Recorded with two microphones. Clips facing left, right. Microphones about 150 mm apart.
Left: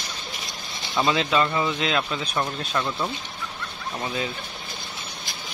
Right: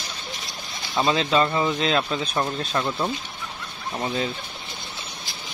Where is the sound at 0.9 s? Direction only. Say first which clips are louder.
Right 1 dB; 25° right (ahead or behind).